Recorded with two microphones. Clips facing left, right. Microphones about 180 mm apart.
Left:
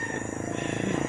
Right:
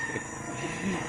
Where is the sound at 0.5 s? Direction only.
65° left (ahead or behind).